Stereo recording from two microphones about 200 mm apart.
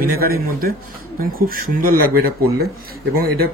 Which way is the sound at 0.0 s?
50° right (ahead or behind).